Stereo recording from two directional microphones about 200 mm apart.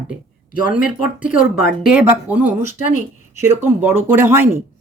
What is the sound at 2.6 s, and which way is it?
Speech, 40° left (ahead or behind).